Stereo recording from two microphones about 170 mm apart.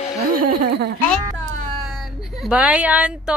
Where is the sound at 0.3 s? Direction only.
65° right (ahead or behind).